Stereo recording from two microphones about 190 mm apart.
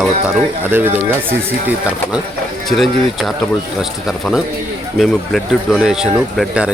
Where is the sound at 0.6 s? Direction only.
10° right (ahead or behind).